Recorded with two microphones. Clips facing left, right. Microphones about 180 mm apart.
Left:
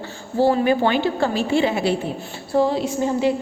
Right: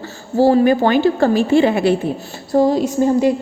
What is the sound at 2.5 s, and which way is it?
Speech, 40° right (ahead or behind).